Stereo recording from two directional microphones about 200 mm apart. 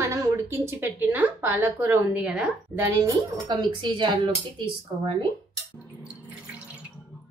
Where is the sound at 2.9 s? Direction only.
20° right (ahead or behind).